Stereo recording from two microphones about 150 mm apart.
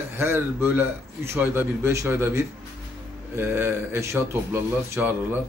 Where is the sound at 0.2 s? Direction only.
15° right (ahead or behind).